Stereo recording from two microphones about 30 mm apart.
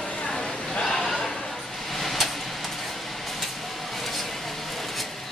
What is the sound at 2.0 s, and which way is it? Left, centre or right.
Vehicle, centre.